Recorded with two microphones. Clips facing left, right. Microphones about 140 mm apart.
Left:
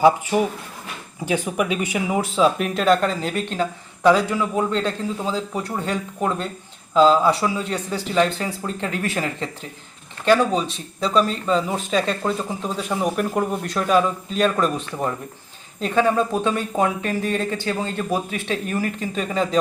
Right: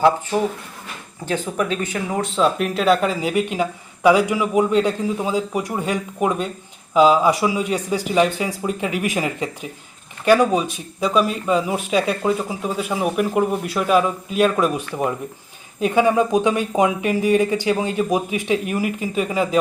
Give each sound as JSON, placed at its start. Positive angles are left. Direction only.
{"t": 0.0, "sound": "speech", "side_deg": 10}